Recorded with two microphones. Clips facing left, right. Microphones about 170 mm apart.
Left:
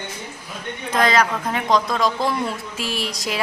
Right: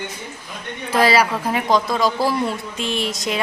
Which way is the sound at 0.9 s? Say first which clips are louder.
Right 2 dB; 5° right (ahead or behind).